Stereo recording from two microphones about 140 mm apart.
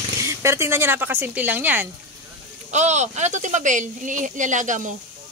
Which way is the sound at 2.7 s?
55° right (ahead or behind).